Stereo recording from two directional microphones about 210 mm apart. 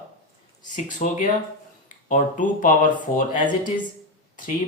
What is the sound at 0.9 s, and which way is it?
Speech, 35° left (ahead or behind).